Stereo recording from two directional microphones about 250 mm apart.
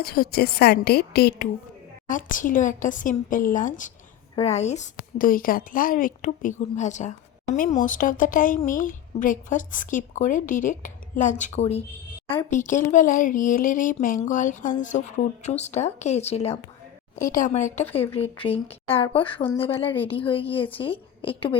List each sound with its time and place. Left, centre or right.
0.0 s a woman's voice: left